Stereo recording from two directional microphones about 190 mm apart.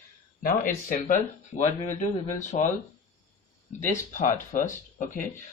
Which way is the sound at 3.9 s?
40° left (ahead or behind).